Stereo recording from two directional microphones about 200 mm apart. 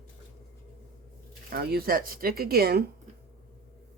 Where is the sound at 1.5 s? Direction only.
50° right (ahead or behind).